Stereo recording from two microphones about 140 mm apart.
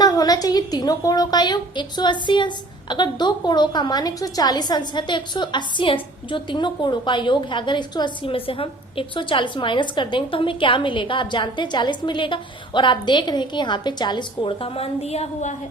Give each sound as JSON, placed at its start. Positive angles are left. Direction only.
{"t": 0.0, "sound": "a woman's voice", "side_deg": 30}